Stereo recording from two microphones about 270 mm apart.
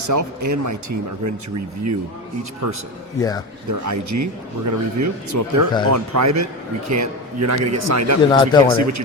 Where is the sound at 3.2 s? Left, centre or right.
Centre.